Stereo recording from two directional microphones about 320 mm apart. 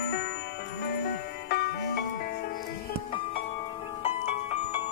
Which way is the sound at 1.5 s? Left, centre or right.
Left.